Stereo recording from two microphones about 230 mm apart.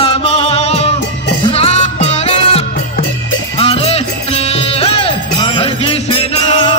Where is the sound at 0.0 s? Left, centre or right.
Left.